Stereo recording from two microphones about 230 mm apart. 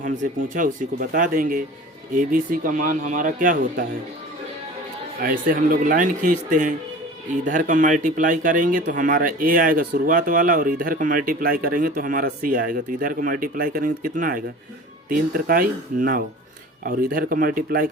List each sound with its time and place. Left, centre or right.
0.0 s speech: right
5.2 s speech: right